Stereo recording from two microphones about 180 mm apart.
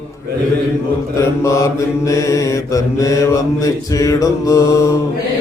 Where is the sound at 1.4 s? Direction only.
15° left (ahead or behind).